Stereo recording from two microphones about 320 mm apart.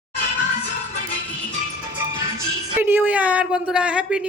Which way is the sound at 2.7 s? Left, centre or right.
Centre.